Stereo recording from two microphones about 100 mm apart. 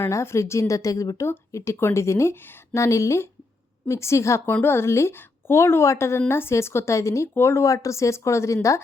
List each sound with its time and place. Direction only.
0.0 s a woman's voice: 25° left (ahead or behind)